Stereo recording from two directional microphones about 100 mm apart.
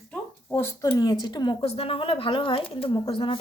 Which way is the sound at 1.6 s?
80° left.